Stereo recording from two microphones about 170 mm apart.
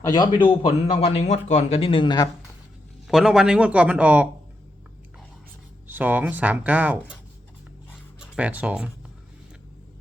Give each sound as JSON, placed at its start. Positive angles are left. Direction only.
{"t": 0.0, "sound": "speech", "side_deg": 25}
{"t": 3.1, "sound": "speech", "side_deg": 0}
{"t": 5.9, "sound": "speech", "side_deg": -10}
{"t": 8.2, "sound": "speech", "side_deg": -10}